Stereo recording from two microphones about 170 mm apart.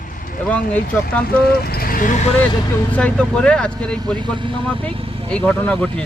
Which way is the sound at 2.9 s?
10° left (ahead or behind).